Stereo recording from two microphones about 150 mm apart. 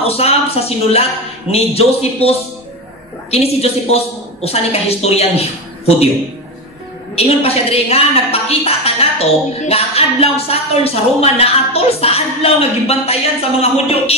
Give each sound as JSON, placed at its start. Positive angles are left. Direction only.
{"t": 0.0, "sound": "a woman's voice", "side_deg": 40}
{"t": 7.2, "sound": "a woman's voice", "side_deg": 45}